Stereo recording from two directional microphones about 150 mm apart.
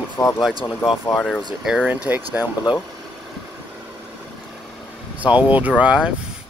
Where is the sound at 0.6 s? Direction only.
30° left (ahead or behind).